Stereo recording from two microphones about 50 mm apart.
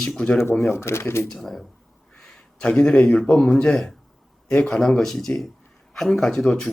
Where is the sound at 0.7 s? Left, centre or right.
Left.